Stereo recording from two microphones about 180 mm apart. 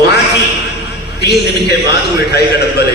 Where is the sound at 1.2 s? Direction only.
65° left (ahead or behind).